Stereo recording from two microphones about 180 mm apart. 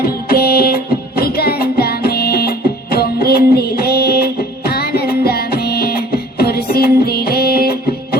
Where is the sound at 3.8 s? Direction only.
60° left (ahead or behind).